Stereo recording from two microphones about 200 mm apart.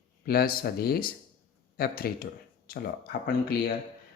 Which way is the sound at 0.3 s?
50° left (ahead or behind).